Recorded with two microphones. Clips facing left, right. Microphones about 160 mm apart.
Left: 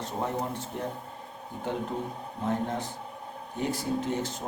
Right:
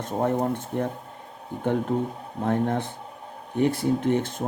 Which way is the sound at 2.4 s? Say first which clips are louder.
Right 6 dB; 55° right (ahead or behind).